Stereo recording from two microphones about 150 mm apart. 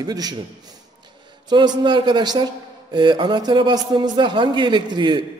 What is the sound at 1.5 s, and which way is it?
A man's voice, 30° right (ahead or behind).